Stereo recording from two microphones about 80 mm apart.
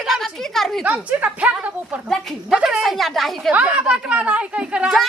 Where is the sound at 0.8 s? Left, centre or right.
Centre.